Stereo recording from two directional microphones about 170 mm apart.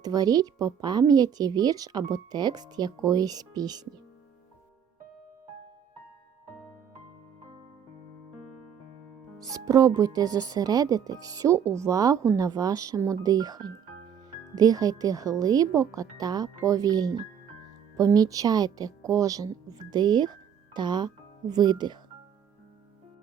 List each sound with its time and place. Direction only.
0.0 s a woman's voice: 20° right (ahead or behind)
9.4 s a woman's voice: 20° right (ahead or behind)